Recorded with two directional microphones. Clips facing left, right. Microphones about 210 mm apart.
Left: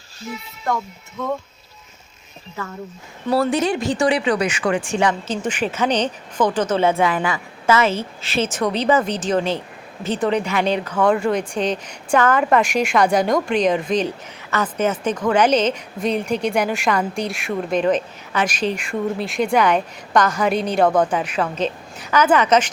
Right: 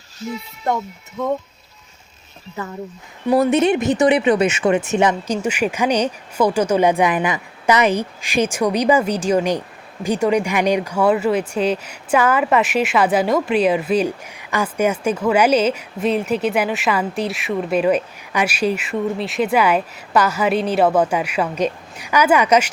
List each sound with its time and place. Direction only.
0.7 s speech: 25° right (ahead or behind)
2.6 s speech: 20° right (ahead or behind)
5.4 s a woman's voice: 10° right (ahead or behind)